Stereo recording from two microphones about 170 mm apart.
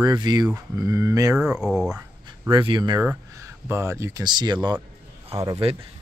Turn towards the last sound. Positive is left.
turn(degrees=-35)  # may be behind; listen again after turning